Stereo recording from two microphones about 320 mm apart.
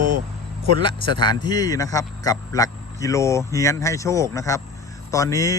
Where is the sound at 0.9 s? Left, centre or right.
Centre.